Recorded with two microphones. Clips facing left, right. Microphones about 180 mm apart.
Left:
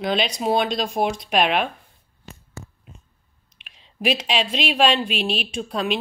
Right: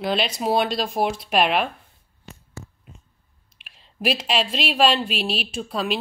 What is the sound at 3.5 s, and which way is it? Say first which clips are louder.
Speech: left 1 dB; 5° right (ahead or behind).